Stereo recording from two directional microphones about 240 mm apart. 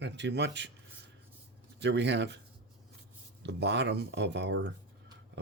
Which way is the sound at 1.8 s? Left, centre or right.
Right.